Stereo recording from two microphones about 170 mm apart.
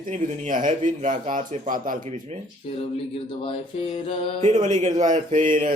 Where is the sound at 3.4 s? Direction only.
35° left (ahead or behind).